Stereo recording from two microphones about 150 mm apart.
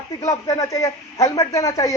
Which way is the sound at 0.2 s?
25° left (ahead or behind).